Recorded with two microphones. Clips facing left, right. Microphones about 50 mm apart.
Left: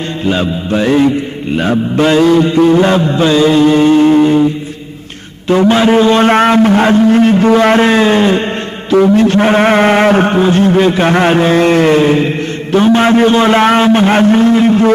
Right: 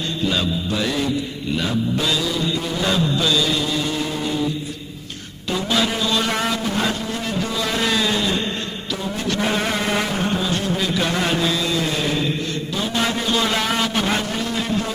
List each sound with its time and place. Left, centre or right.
0.3 s a man's voice: left
5.5 s a man's voice: left